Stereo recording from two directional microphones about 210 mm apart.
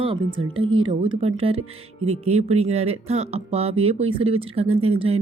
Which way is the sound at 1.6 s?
90° right.